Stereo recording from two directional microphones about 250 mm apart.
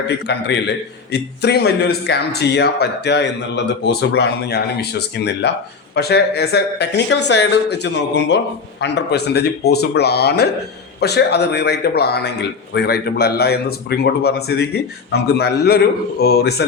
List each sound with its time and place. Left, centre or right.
0.3 s a man's voice: left